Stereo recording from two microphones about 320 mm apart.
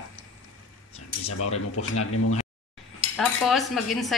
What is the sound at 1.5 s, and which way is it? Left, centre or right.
Speech, left.